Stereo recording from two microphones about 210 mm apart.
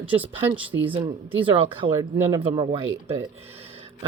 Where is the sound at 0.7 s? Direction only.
15° right (ahead or behind).